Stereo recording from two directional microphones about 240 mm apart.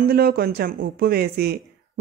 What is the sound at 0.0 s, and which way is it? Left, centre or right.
Speech, right.